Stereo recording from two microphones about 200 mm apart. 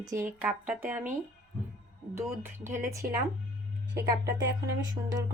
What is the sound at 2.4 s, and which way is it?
Speech, 10° right (ahead or behind).